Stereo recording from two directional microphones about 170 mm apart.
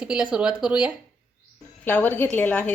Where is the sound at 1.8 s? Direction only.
10° left (ahead or behind).